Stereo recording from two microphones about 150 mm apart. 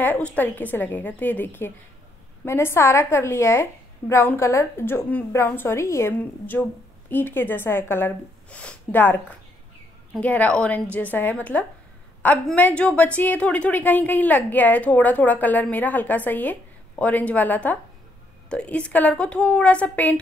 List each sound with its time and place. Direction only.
0.0 s a woman's voice: 10° left (ahead or behind)
10.2 s a woman's voice: 10° left (ahead or behind)